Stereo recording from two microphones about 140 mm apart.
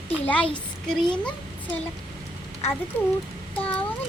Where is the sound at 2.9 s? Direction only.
10° left (ahead or behind).